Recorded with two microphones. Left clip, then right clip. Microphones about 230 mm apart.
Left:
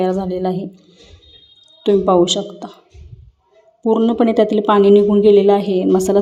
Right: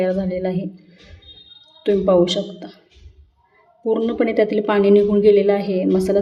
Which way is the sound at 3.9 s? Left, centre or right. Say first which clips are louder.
Left 4 dB; centre.